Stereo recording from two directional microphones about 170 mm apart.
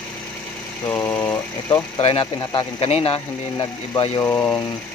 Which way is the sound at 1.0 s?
15° left (ahead or behind).